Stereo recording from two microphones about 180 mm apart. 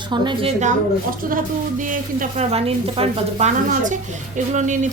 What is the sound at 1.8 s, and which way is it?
Speech, 45° right (ahead or behind).